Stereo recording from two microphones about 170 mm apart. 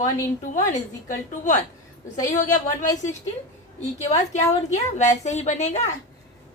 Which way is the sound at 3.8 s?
40° left (ahead or behind).